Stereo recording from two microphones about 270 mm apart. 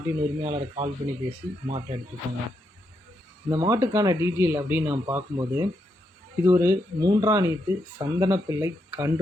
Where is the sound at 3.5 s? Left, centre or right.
Centre.